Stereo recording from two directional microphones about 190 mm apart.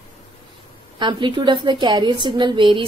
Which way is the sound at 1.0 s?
25° right (ahead or behind).